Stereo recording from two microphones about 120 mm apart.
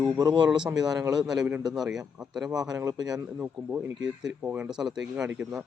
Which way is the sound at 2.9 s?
35° right (ahead or behind).